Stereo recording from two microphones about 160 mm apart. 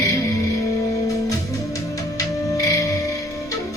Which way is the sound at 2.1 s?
20° left (ahead or behind).